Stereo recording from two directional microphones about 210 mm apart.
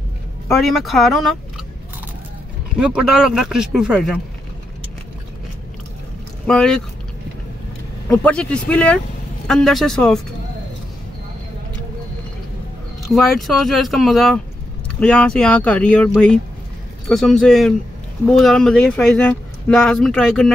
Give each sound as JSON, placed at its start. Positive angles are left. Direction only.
{"t": 0.5, "sound": "speech", "side_deg": 0}
{"t": 2.8, "sound": "speech", "side_deg": -5}
{"t": 6.4, "sound": "speech", "side_deg": 5}
{"t": 8.1, "sound": "speech", "side_deg": 5}
{"t": 13.1, "sound": "speech", "side_deg": 0}
{"t": 17.1, "sound": "speech", "side_deg": 0}